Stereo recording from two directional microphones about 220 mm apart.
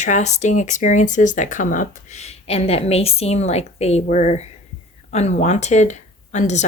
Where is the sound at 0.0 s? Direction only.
30° left (ahead or behind).